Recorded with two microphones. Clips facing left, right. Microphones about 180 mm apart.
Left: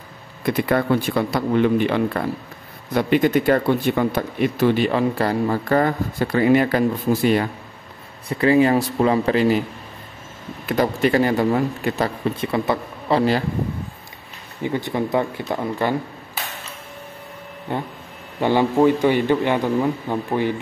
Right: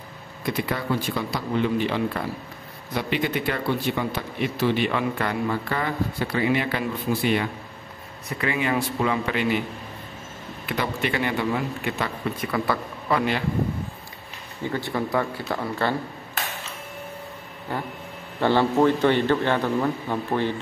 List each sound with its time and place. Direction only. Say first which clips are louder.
0.5 s a man's voice: left 7 dB; 60° left (ahead or behind); by 9.6 s 35° left (ahead or behind)
10.7 s speech: left 8 dB; 40° left (ahead or behind)
12.4 s speech: left 2 dB; 25° left (ahead or behind)
14.6 s speech: left 4 dB; 20° left (ahead or behind)
17.7 s a man's voice: left 3 dB; 20° left (ahead or behind)